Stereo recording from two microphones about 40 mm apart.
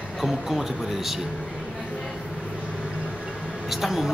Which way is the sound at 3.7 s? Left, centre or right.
Centre.